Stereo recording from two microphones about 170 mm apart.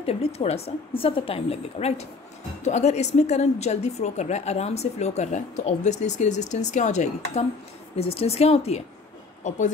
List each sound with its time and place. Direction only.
0.0 s a woman's voice: 35° left (ahead or behind)